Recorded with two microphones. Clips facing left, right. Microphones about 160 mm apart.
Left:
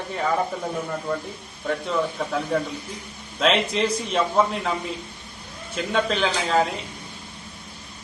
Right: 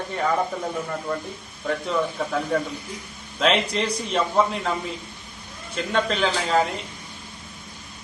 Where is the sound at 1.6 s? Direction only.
Centre (ahead or behind).